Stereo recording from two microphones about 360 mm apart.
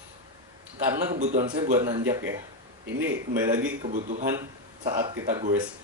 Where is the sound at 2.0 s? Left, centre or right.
Centre.